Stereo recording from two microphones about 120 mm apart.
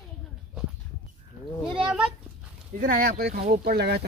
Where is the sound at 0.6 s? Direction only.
5° right (ahead or behind).